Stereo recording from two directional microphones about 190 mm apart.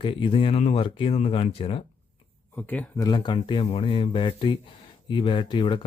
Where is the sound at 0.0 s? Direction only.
25° left (ahead or behind).